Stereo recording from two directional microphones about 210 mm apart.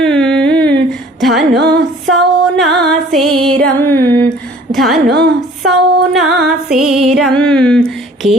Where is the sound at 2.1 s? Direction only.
Centre (ahead or behind).